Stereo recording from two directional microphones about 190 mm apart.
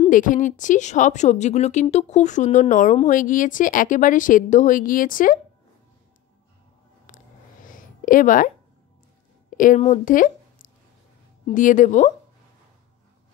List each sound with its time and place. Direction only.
0.1 s a woman's voice: 45° left (ahead or behind)
7.1 s a sound: 45° left (ahead or behind)
9.6 s a woman's voice: 40° left (ahead or behind)